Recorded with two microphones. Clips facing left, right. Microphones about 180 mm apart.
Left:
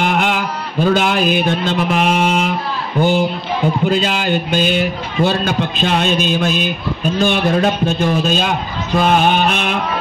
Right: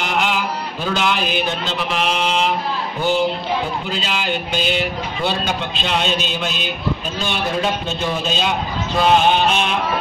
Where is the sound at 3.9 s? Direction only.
50° left (ahead or behind).